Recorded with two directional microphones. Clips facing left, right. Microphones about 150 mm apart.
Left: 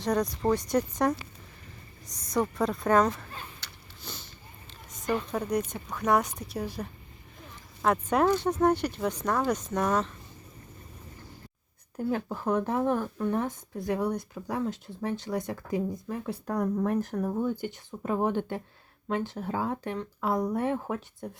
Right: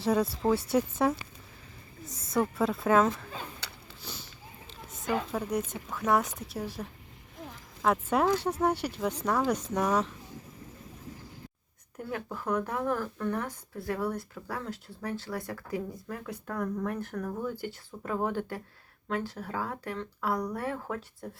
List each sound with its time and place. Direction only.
0.0 s a woman's voice: 5° right (ahead or behind)
4.0 s a sound: 10° right (ahead or behind)
5.3 s a woman's voice: 5° right (ahead or behind)
11.9 s speech: 30° left (ahead or behind)
17.2 s speech: 25° left (ahead or behind)